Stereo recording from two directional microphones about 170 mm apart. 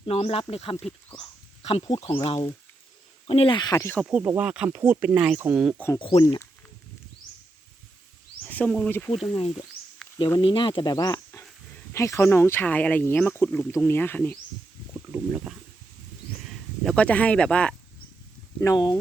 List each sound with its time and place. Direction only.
0.0 s speech: 35° left (ahead or behind); by 4.0 s 15° left (ahead or behind)
4.1 s speech: 10° right (ahead or behind)
6.0 s speech: 30° left (ahead or behind)
6.2 s speech: 15° left (ahead or behind)
8.4 s speech: 10° left (ahead or behind)
10.3 s speech: 30° left (ahead or behind); by 14.3 s 10° left (ahead or behind)
15.1 s speech: 10° right (ahead or behind)
16.5 s speech: 5° left (ahead or behind)
18.6 s speech: 25° left (ahead or behind)